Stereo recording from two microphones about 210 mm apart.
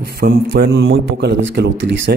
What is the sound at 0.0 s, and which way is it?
A man's voice, 45° right (ahead or behind).